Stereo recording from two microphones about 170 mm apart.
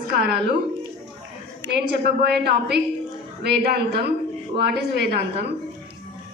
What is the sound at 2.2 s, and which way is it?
A woman's voice, 75° right (ahead or behind).